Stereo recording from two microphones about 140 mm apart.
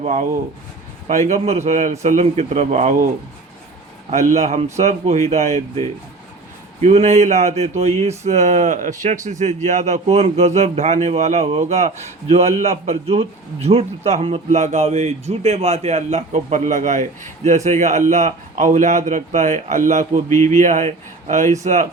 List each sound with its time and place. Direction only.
0.0 s a man's voice: 55° right (ahead or behind)
4.1 s a man's voice: 60° right (ahead or behind)